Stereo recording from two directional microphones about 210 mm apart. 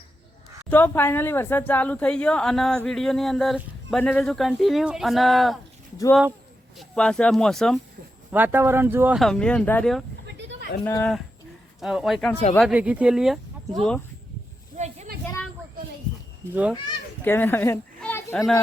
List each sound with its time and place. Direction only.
0.7 s a woman's voice: 10° left (ahead or behind)
6.7 s a woman's voice: 5° left (ahead or behind)
8.3 s a woman's voice: 10° right (ahead or behind); by 11.2 s 10° left (ahead or behind)
11.8 s a woman's voice: centre (ahead or behind)
14.8 s a sound: 35° right (ahead or behind)
17.2 s speech: 10° left (ahead or behind)